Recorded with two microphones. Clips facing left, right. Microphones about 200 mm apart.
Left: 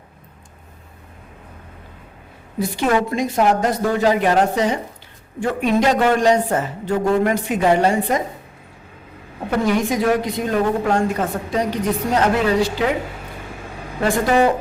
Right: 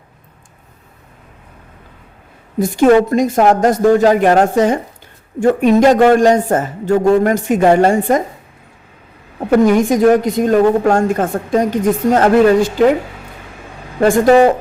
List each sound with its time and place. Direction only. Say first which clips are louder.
2.6 s a woman's voice: right 9 dB; 45° right (ahead or behind)
9.6 s a woman's voice: right 6 dB; 45° right (ahead or behind)
14.0 s a woman's voice: right 7 dB; 45° right (ahead or behind)